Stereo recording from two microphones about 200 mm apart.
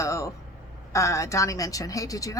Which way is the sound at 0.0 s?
15° left (ahead or behind).